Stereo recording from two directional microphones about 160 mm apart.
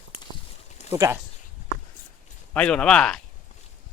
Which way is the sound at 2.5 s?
5° left (ahead or behind).